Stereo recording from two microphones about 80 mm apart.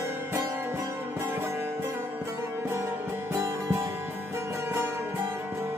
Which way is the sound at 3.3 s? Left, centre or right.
Right.